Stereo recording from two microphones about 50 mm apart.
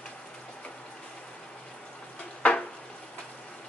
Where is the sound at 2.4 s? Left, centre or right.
Left.